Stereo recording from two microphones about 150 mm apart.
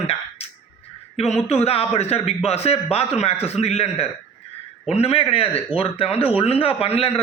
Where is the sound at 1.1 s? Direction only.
45° left (ahead or behind).